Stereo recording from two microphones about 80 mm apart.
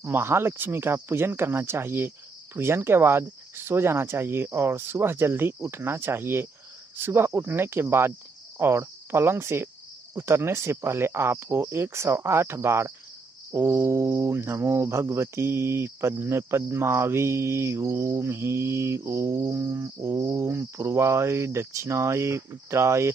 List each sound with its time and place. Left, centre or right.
0.0 s speech: right
8.5 s cricket: right